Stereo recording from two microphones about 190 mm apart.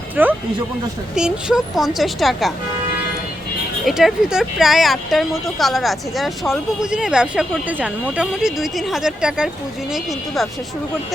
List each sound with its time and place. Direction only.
0.2 s speech: 10° right (ahead or behind)
3.8 s speech: centre (ahead or behind)